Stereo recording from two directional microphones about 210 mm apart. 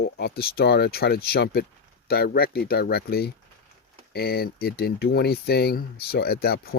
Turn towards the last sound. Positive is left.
turn(degrees=45)  # may be behind; listen again after turning